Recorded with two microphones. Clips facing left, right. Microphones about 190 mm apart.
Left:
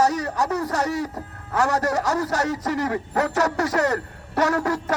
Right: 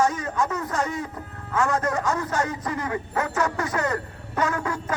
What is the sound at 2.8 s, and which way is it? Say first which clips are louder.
Speech: left 2 dB; 40° left (ahead or behind).